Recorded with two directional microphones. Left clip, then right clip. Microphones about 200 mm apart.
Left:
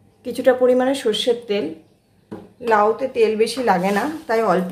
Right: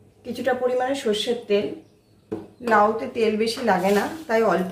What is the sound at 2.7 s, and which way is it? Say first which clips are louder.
Speech: left 2 dB; 40° left (ahead or behind).